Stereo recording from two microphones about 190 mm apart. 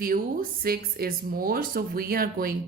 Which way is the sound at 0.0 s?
50° right (ahead or behind).